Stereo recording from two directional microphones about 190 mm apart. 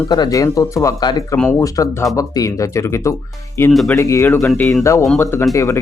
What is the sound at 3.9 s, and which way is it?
Speech, 15° left (ahead or behind).